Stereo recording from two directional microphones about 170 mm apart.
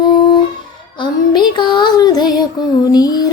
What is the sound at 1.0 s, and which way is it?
Music, 25° left (ahead or behind).